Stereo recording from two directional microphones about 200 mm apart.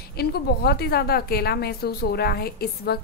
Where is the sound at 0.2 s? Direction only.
55° left (ahead or behind).